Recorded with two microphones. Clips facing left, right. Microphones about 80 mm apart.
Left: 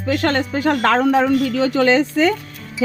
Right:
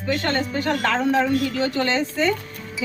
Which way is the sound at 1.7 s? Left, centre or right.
Left.